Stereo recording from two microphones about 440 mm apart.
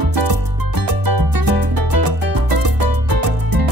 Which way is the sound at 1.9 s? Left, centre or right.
Right.